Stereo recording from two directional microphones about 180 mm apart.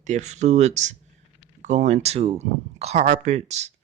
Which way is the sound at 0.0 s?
40° right (ahead or behind).